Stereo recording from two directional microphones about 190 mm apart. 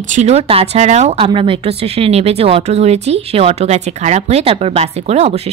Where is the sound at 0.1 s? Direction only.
35° right (ahead or behind).